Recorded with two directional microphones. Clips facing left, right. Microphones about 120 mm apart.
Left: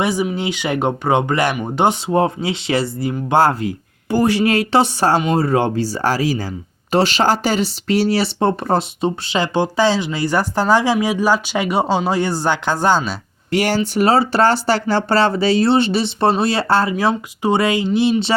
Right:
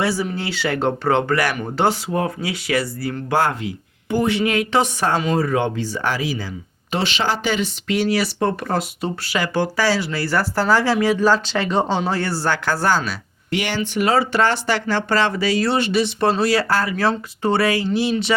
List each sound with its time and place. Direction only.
0.0 s speech: 20° left (ahead or behind)
13.5 s speech: 40° left (ahead or behind)
16.9 s speech: 15° left (ahead or behind)